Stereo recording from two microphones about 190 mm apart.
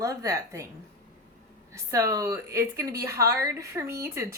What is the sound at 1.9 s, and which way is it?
Speech, 15° right (ahead or behind).